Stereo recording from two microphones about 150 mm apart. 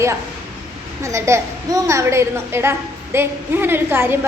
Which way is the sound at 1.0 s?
20° right (ahead or behind).